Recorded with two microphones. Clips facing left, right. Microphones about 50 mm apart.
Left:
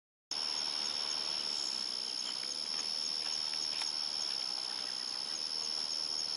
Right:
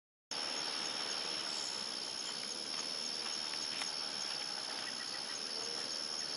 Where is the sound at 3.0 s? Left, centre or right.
Left.